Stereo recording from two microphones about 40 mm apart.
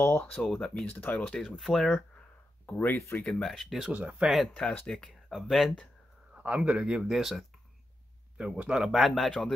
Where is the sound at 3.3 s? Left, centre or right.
Centre.